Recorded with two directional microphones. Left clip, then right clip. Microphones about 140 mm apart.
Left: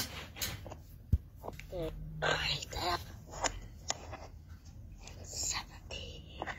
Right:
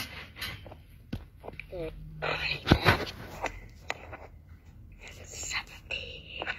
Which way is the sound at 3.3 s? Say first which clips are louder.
Left 4 dB; 30° right (ahead or behind).